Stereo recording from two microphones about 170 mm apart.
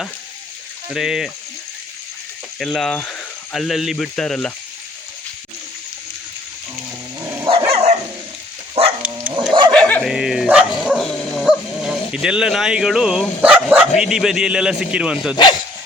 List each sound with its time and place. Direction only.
0.9 s a man's voice: centre (ahead or behind)
2.6 s speech: 5° left (ahead or behind)
7.7 s dog: 40° right (ahead or behind)
9.0 s dog: 10° right (ahead or behind)
9.5 s dog: 30° right (ahead or behind)
9.7 s dog: 5° left (ahead or behind)
13.4 s a man's voice: 5° right (ahead or behind)